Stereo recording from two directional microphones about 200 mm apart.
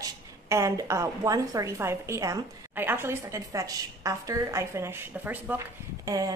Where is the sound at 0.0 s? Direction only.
15° right (ahead or behind).